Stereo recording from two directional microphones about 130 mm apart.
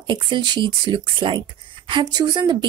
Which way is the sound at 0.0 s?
40° right (ahead or behind).